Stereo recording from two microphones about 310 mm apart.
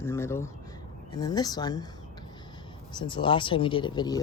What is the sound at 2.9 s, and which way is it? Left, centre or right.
Speech, centre.